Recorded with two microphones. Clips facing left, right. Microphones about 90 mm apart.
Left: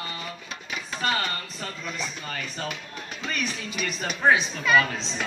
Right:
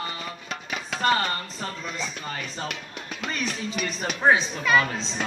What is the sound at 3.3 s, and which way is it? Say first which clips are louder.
Speech: right 1 dB; 30° right (ahead or behind).